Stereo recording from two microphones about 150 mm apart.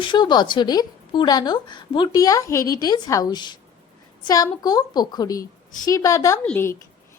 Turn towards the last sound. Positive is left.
turn(degrees=15)  # may be behind; listen again after turning